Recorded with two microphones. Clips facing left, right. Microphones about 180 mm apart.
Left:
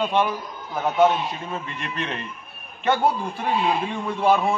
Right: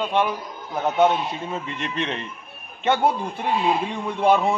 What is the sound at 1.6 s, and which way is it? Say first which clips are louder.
A man's voice: right 3 dB; 25° right (ahead or behind).